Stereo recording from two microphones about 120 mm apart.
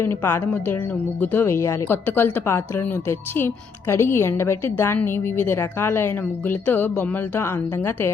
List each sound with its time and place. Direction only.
0.0 s speech: 20° left (ahead or behind)